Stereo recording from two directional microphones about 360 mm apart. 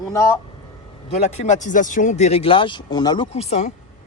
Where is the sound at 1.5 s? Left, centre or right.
Left.